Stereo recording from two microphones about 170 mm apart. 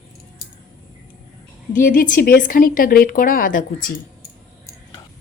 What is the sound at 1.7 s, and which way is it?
A woman's voice, 50° left (ahead or behind).